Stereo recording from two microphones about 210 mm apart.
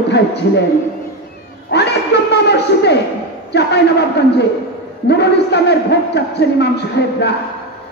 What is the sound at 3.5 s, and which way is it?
Speech, 55° left (ahead or behind).